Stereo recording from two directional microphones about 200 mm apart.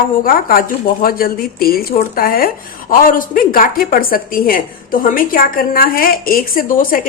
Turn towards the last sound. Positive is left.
turn(degrees=45)  # may be behind; listen again after turning